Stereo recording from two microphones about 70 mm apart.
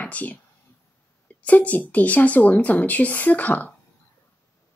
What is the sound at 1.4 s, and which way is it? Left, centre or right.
A woman's voice, left.